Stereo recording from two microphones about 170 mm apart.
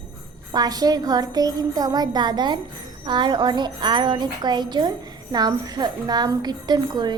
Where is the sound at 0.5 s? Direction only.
25° right (ahead or behind).